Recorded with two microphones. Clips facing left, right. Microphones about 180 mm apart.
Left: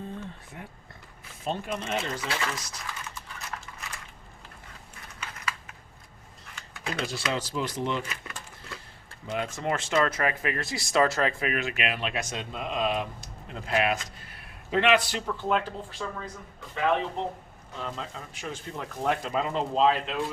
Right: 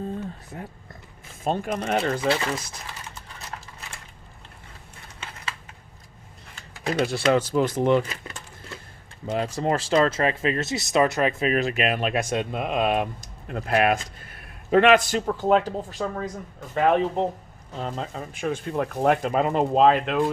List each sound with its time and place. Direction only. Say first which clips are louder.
1.5 s speech: right 6 dB; 50° right (ahead or behind)
2.2 s speech: right 8 dB; 30° right (ahead or behind)
7.3 s speech: right 11 dB; 55° right (ahead or behind)
8.1 s coin: right 3 dB; 25° right (ahead or behind)
9.2 s speech: right 5 dB; 35° right (ahead or behind); by 20.3 s 60° right (ahead or behind)